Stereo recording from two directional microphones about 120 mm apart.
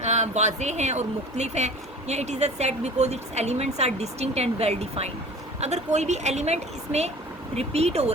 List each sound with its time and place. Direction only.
0.0 s speech: 70° right (ahead or behind)